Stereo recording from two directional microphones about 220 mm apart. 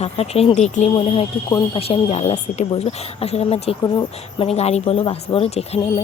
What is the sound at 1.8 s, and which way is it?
Speech, 25° left (ahead or behind).